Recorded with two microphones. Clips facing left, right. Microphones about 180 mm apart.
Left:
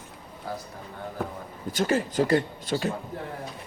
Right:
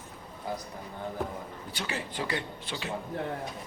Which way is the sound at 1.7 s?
45° left (ahead or behind).